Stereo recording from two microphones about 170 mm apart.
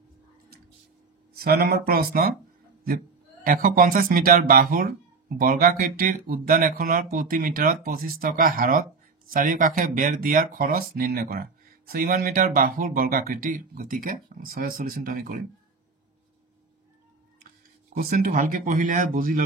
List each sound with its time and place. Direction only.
1.3 s speech: 65° right (ahead or behind)
3.4 s speech: 55° right (ahead or behind)
17.9 s speech: 55° right (ahead or behind)